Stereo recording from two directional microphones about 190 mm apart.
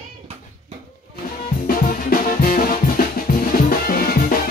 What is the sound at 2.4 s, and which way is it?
Music, 50° left (ahead or behind).